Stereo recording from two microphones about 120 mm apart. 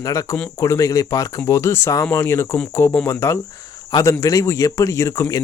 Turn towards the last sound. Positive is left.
turn(degrees=25)  # may be behind; listen again after turning